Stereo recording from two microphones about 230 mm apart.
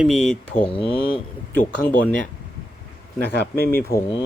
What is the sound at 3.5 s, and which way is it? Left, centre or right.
Speech, right.